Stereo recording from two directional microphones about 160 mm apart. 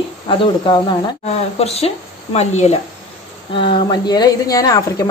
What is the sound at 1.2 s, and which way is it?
A woman's voice, 40° left (ahead or behind).